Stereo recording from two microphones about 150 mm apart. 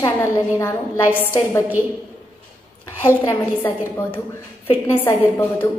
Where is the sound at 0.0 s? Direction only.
20° left (ahead or behind).